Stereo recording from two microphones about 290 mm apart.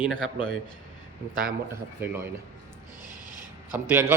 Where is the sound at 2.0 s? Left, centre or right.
Centre.